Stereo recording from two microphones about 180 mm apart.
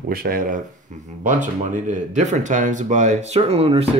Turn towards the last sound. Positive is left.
turn(degrees=-35)  # may be behind; listen again after turning